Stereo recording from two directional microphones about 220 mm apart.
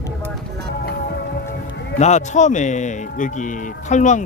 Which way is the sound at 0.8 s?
45° left (ahead or behind).